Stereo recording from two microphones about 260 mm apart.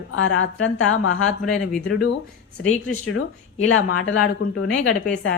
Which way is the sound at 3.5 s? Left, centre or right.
Left.